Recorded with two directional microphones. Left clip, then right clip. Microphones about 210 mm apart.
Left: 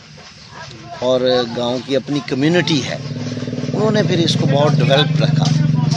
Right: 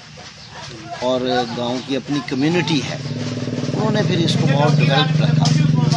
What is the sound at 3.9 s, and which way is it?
Speech, 55° left (ahead or behind).